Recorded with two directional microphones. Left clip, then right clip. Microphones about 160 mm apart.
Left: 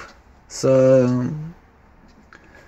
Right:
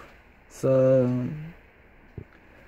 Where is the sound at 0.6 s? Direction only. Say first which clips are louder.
Left 6 dB; centre (ahead or behind).